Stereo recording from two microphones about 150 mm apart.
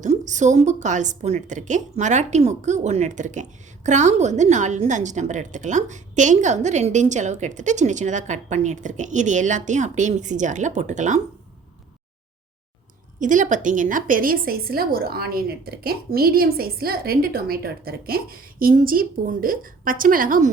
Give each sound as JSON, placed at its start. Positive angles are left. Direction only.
{"t": 0.0, "sound": "a woman's voice", "side_deg": -55}
{"t": 13.1, "sound": "a woman's voice", "side_deg": -55}